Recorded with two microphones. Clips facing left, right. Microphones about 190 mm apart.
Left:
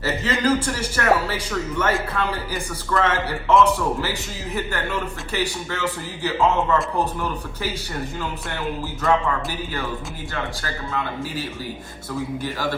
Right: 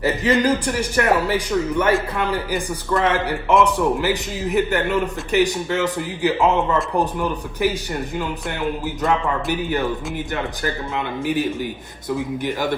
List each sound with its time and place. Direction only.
0.0 s speech: 15° right (ahead or behind)
9.0 s speech: 20° right (ahead or behind)